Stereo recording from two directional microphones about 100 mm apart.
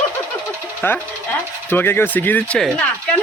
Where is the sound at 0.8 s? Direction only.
25° left (ahead or behind).